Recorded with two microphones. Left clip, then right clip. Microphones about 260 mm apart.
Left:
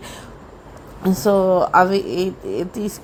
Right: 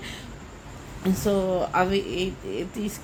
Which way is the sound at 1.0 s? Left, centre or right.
Left.